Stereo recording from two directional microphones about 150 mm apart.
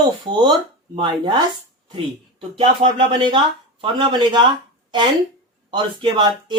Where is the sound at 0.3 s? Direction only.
30° right (ahead or behind).